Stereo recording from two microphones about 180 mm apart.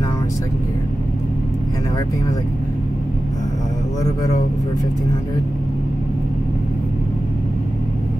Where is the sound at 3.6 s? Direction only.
20° left (ahead or behind).